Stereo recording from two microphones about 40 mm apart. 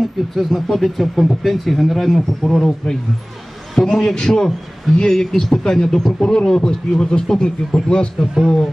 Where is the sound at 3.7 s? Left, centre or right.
Centre; by 8.2 s left.